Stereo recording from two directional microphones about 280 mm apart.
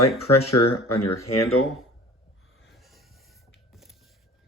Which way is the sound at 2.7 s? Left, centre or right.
Centre.